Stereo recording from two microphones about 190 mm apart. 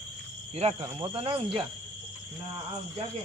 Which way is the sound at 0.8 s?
25° right (ahead or behind).